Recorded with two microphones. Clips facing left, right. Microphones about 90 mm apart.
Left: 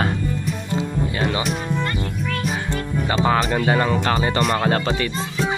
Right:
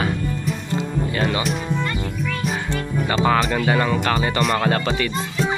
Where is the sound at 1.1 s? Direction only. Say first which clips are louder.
Right 3 dB; 20° left (ahead or behind).